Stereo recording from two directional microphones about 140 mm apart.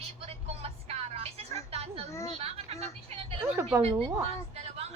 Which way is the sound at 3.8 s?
45° right (ahead or behind).